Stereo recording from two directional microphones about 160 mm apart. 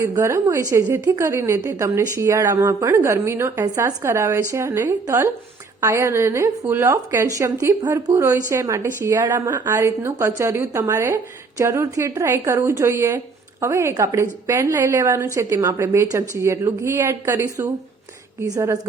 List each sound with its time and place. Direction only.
0.0 s a woman's voice: 15° right (ahead or behind)